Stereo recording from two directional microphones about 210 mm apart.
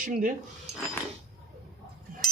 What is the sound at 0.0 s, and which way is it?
Speech, 40° right (ahead or behind).